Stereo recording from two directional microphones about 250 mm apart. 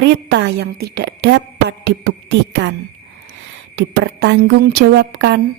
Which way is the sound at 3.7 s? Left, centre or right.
Right.